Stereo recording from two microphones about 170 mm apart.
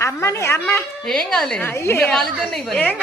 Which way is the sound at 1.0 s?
5° left (ahead or behind).